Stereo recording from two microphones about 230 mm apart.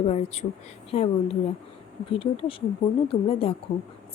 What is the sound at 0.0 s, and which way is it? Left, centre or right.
Speech, left.